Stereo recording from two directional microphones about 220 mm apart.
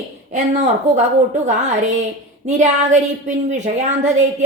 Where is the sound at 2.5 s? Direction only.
35° right (ahead or behind).